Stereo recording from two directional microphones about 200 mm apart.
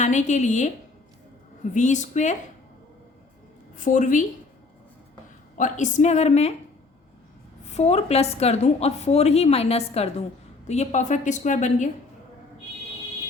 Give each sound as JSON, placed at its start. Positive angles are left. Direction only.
{"t": 0.0, "sound": "a woman's voice", "side_deg": 35}
{"t": 1.7, "sound": "a woman's voice", "side_deg": 35}
{"t": 3.8, "sound": "a woman's voice", "side_deg": 40}
{"t": 5.5, "sound": "a woman's voice", "side_deg": 40}
{"t": 7.7, "sound": "a woman's voice", "side_deg": 35}